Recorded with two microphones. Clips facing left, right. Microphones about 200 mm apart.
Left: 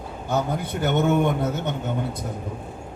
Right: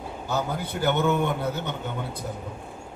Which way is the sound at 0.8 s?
55° left (ahead or behind).